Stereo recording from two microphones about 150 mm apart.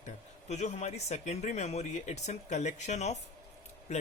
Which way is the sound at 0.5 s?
50° left (ahead or behind).